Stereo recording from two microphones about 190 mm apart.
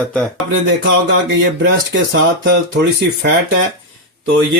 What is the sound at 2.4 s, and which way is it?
Speech, 70° right (ahead or behind).